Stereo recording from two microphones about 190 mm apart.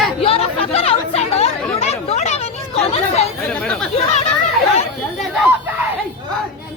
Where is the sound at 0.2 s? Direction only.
30° left (ahead or behind).